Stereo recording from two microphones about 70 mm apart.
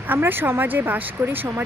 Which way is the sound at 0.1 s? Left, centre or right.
Right.